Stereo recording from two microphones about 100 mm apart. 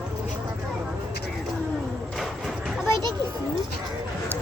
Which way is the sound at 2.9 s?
45° right (ahead or behind).